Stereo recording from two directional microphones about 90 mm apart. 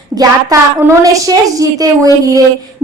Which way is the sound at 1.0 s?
40° right (ahead or behind).